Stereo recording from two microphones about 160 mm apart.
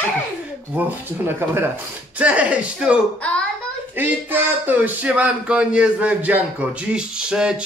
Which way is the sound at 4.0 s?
10° right (ahead or behind).